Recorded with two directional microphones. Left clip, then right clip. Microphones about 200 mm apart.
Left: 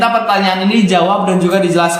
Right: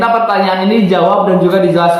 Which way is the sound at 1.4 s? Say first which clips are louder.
Right 2 dB; 30° left (ahead or behind).